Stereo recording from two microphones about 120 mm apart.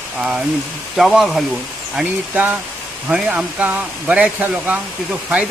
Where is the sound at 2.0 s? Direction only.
15° right (ahead or behind).